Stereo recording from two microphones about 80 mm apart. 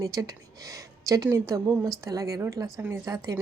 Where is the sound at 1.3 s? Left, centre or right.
Right.